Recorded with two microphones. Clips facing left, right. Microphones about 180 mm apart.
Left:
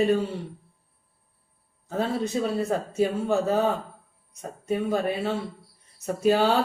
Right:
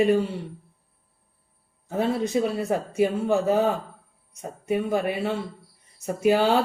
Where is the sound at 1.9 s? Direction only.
15° right (ahead or behind).